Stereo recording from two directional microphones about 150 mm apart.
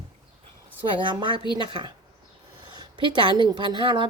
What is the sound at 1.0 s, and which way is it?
Speech, 30° right (ahead or behind).